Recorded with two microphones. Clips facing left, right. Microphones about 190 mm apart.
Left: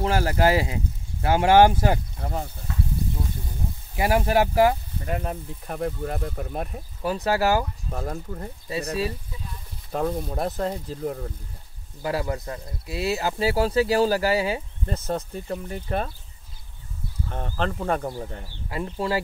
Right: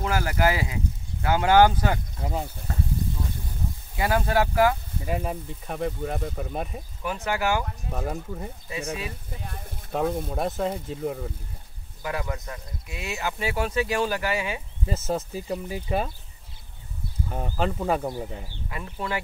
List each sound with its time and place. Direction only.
0.0 s speech: 30° left (ahead or behind)
2.2 s speech: 10° right (ahead or behind)
3.9 s speech: 25° left (ahead or behind)
5.0 s speech: 5° right (ahead or behind)
7.0 s speech: 35° left (ahead or behind)
7.9 s speech: centre (ahead or behind)
9.3 s a sound: 60° right (ahead or behind)
9.9 s speech: centre (ahead or behind)
12.0 s speech: 30° left (ahead or behind)
14.9 s speech: 5° right (ahead or behind)
17.3 s speech: 5° right (ahead or behind)
18.7 s speech: 25° left (ahead or behind)